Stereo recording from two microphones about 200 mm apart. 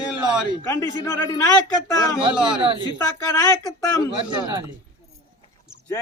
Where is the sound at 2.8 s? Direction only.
15° left (ahead or behind).